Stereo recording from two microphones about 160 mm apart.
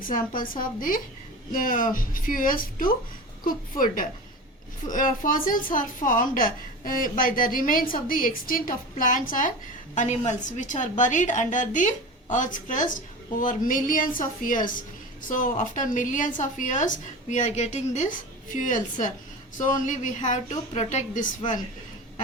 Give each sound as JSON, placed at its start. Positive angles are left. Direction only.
{"t": 0.0, "sound": "a woman's voice", "side_deg": 60}